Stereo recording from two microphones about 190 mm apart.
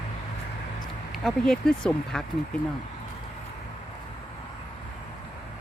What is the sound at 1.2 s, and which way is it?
Speech, centre (ahead or behind).